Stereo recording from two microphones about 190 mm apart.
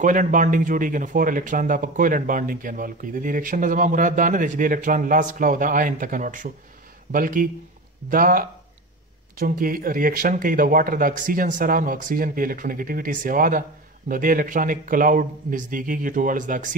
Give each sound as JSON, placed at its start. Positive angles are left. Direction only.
{"t": 0.0, "sound": "speech", "side_deg": -45}